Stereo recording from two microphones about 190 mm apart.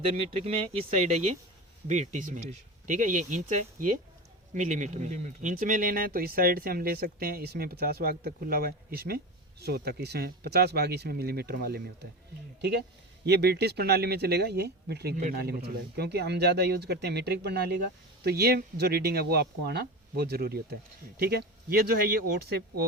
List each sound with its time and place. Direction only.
0.0 s speech: 30° right (ahead or behind); by 11.8 s 55° right (ahead or behind)
13.2 s speech: 60° right (ahead or behind)